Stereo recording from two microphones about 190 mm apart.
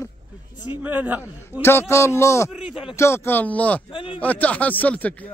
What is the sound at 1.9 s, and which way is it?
Speech, 15° left (ahead or behind).